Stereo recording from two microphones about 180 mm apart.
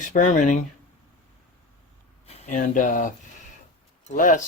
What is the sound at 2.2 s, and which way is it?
A man's voice, 35° left (ahead or behind).